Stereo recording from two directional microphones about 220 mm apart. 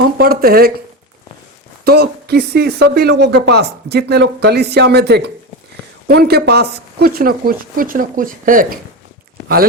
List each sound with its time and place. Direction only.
0.2 s speech: 45° right (ahead or behind)
1.8 s speech: 45° right (ahead or behind)